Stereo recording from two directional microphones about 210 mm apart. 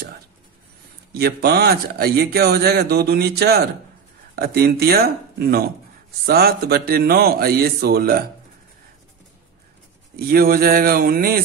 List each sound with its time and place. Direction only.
1.1 s speech: 50° right (ahead or behind)
10.1 s speech: 45° right (ahead or behind)